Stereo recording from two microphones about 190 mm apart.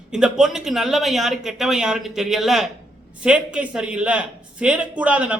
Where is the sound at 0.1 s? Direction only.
5° right (ahead or behind).